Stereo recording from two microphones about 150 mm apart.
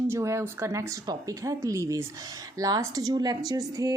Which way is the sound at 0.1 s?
20° right (ahead or behind).